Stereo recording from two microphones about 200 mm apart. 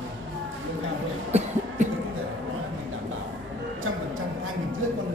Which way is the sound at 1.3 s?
35° right (ahead or behind).